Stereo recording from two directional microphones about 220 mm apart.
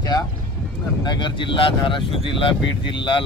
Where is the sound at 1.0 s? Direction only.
20° left (ahead or behind).